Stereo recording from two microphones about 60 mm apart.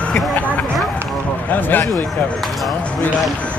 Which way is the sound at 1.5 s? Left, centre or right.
Left.